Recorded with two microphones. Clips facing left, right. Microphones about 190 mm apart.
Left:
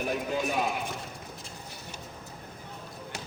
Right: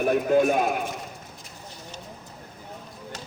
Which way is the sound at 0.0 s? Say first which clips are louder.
Right 10 dB; 55° right (ahead or behind).